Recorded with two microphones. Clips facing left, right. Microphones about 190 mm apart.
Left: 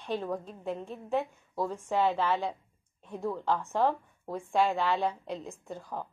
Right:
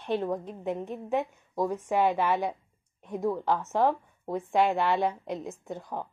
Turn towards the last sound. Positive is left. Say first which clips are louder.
# right 3 dB
turn(degrees=-20)  # may be behind; listen again after turning